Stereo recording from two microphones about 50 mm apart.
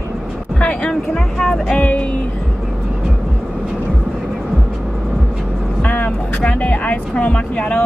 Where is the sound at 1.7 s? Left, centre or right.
Left.